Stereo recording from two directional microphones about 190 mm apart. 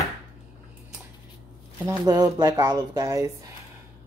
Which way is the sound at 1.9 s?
20° right (ahead or behind).